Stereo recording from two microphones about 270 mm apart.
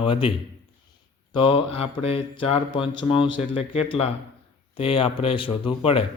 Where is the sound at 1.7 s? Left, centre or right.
Left.